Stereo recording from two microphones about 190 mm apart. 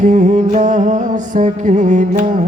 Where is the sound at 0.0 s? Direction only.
40° right (ahead or behind).